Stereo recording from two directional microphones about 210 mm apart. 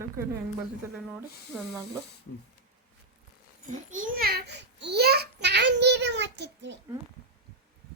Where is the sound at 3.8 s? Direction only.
40° right (ahead or behind); by 6.7 s 55° right (ahead or behind).